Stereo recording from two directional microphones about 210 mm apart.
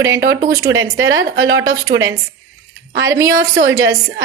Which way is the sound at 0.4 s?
15° right (ahead or behind).